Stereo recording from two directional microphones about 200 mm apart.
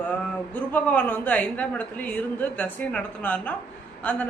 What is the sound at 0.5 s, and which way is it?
Speech, 10° left (ahead or behind).